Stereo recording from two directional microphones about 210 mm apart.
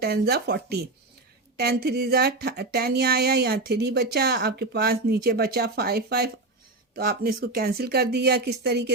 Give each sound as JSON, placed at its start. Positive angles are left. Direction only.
{"t": 0.0, "sound": "speech", "side_deg": -50}